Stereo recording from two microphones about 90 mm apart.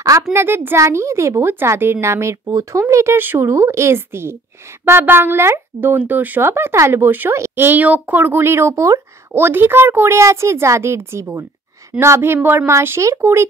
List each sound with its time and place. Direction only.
0.3 s speech: 25° right (ahead or behind)
9.4 s speech: 25° right (ahead or behind)